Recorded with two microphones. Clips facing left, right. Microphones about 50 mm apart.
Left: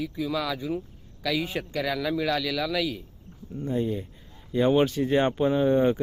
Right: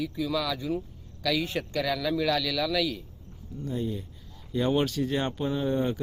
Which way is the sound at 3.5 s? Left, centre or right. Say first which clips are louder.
Left 4 dB; left.